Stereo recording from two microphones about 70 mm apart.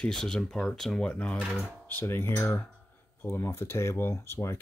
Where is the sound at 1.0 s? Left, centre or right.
Centre.